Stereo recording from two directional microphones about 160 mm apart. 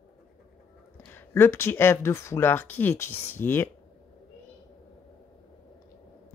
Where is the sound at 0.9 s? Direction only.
15° left (ahead or behind).